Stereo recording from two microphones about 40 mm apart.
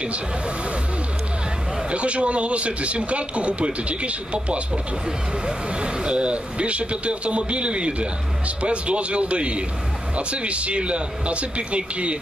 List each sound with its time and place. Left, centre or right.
1.9 s speech: right
5.7 s a man's voice: right